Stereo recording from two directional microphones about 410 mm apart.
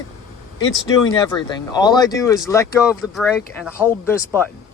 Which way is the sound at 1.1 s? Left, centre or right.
Centre.